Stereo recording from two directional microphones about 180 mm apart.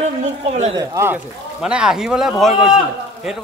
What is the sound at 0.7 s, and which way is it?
Speech, 15° right (ahead or behind).